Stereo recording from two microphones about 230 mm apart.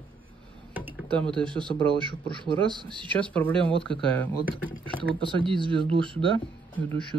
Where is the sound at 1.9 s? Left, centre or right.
Right.